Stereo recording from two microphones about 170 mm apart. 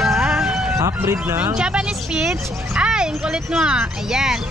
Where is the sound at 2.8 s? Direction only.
5° right (ahead or behind).